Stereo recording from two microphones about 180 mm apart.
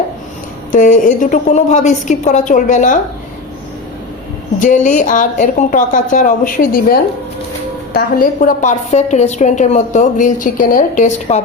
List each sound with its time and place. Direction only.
0.7 s a woman's voice: 45° left (ahead or behind)
4.6 s a woman's voice: 45° left (ahead or behind)